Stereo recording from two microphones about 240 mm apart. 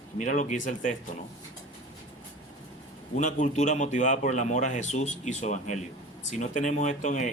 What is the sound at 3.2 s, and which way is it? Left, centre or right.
Speech, left.